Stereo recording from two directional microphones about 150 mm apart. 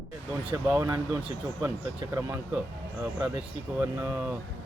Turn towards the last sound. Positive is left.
turn(degrees=-15)  # may be behind; listen again after turning